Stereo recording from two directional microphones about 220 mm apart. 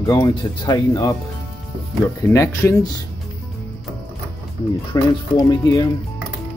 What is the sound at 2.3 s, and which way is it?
Speech, 10° left (ahead or behind).